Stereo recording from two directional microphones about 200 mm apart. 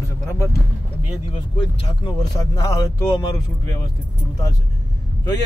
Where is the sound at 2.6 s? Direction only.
15° left (ahead or behind).